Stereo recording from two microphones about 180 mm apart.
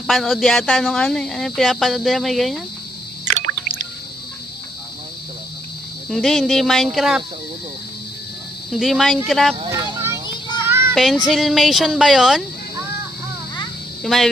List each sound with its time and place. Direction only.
0.1 s speech: centre (ahead or behind)
3.3 s a sound: 40° right (ahead or behind)
6.1 s speech: centre (ahead or behind)
8.7 s speech: centre (ahead or behind)
9.7 s a sound: 20° right (ahead or behind)
10.7 s children playing: 15° right (ahead or behind)
10.9 s child singing: centre (ahead or behind)
11.3 s speech: centre (ahead or behind)
14.0 s speech: centre (ahead or behind)